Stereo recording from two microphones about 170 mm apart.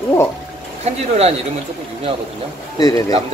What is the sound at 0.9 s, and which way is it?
Speech, 40° right (ahead or behind).